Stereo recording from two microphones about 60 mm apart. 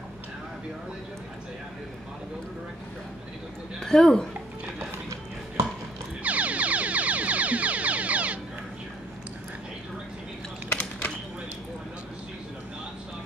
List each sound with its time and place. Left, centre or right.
3.8 s a woman's voice: centre
6.2 s music: right
10.7 s a sound: centre